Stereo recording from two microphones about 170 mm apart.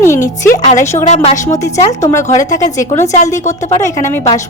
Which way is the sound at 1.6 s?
15° left (ahead or behind).